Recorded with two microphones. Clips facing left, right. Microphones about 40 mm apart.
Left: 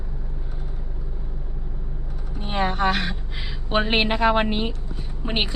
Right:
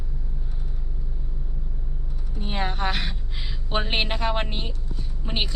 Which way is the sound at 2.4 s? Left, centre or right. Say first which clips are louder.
Left 5 dB; centre.